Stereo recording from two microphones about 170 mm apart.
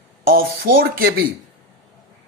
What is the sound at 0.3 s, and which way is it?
Speech, 60° right (ahead or behind).